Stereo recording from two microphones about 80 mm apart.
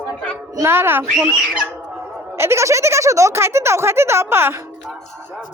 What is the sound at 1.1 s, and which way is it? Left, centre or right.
Speech, centre.